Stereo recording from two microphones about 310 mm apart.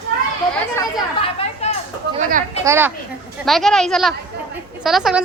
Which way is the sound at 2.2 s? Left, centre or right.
Right.